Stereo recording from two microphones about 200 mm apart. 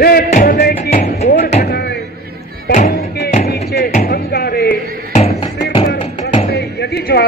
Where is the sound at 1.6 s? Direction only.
55° left (ahead or behind).